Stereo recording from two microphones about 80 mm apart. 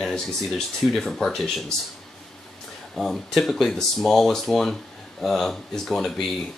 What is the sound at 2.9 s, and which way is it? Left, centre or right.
Speech, centre.